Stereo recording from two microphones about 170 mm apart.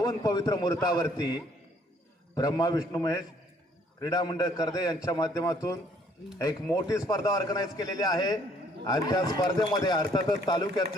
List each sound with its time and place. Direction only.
0.0 s a man's voice: 20° left (ahead or behind)